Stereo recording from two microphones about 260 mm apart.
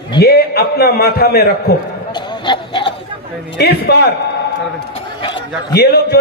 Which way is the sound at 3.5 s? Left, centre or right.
Left.